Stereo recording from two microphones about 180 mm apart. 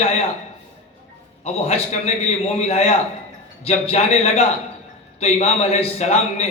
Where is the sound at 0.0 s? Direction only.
35° left (ahead or behind).